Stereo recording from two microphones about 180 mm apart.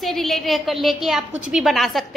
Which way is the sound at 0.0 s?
Centre (ahead or behind).